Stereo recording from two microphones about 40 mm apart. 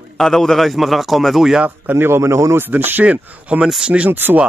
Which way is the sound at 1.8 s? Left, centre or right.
Right.